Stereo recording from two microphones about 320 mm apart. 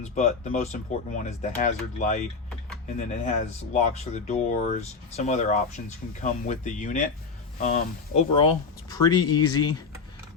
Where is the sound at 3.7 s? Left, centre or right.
Left.